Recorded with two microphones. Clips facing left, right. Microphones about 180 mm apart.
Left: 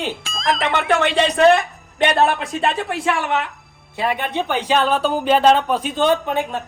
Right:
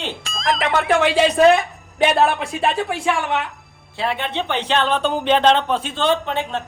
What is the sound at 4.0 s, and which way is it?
Speech, 15° left (ahead or behind).